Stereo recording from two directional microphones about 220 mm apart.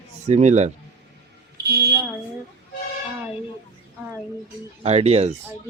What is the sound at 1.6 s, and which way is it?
Fire alarm, 50° right (ahead or behind).